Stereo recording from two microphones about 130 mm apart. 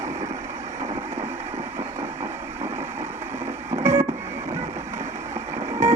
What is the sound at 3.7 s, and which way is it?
Printer, 20° right (ahead or behind).